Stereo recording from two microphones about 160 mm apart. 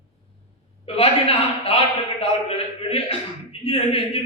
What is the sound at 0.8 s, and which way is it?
A man's voice, 35° left (ahead or behind).